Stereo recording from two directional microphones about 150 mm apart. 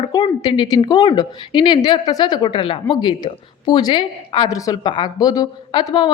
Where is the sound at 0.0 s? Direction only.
25° left (ahead or behind).